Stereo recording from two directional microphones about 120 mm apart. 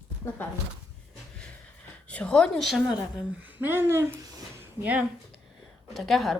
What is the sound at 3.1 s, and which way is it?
Speech, 15° right (ahead or behind).